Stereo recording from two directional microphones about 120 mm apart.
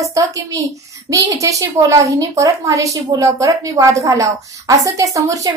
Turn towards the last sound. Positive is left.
turn(degrees=-30)  # may be behind; listen again after turning